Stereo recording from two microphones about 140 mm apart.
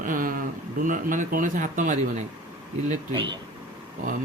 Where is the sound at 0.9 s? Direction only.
70° right (ahead or behind).